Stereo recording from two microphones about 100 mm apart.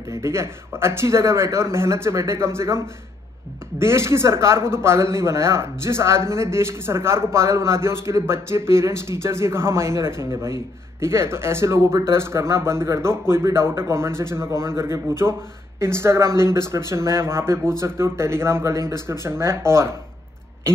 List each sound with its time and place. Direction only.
0.1 s a man's voice: 30° right (ahead or behind)
3.8 s a man's voice: 25° right (ahead or behind)